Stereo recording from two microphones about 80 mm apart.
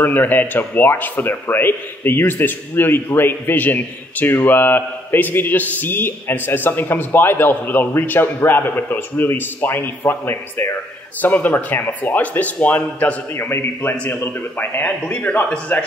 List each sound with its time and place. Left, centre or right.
0.0 s a man's voice: left
14.8 s a man's voice: centre